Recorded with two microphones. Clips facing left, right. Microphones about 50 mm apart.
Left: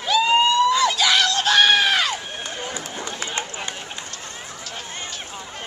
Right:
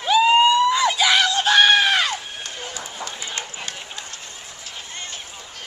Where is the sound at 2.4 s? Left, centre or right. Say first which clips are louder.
Left 3 dB; centre.